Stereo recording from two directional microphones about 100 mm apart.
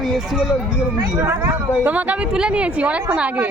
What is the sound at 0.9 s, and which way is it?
Speech, 25° right (ahead or behind).